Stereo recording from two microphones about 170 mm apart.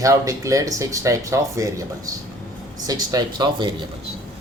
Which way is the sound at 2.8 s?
20° right (ahead or behind).